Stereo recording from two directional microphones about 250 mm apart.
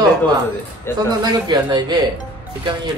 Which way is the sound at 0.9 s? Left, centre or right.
Centre.